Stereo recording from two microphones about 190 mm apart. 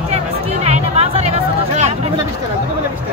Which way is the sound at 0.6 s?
35° right (ahead or behind).